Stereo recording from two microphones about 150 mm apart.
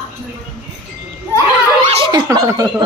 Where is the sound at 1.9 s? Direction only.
35° right (ahead or behind).